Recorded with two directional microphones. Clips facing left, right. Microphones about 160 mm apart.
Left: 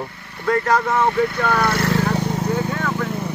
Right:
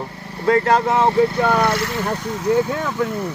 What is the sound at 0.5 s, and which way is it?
Speech, 25° right (ahead or behind).